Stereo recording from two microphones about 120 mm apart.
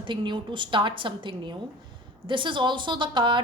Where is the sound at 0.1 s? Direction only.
40° right (ahead or behind).